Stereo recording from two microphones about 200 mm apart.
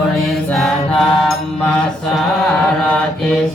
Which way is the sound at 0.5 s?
Centre (ahead or behind).